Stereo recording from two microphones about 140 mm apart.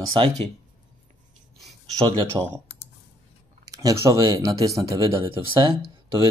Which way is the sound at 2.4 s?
25° right (ahead or behind).